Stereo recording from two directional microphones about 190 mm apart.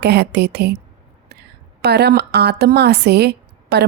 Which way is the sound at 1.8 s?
60° right (ahead or behind).